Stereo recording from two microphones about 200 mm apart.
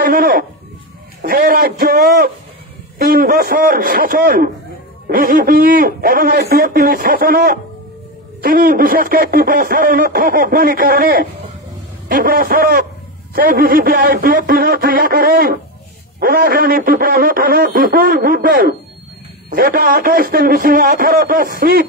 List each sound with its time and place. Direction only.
0.0 s speech: 45° right (ahead or behind)